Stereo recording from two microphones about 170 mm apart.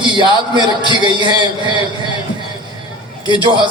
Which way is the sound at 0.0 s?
30° right (ahead or behind).